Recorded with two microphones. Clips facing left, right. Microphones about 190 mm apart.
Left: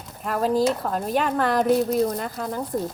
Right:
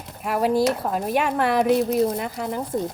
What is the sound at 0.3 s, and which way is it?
Speech, 10° right (ahead or behind).